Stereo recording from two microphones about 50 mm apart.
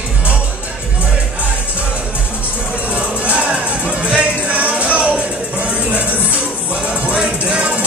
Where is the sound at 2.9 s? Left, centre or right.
Right.